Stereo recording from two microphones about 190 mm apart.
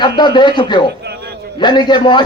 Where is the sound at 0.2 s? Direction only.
25° left (ahead or behind).